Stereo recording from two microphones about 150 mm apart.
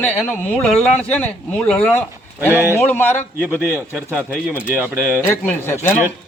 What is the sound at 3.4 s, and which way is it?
Speech, 15° right (ahead or behind).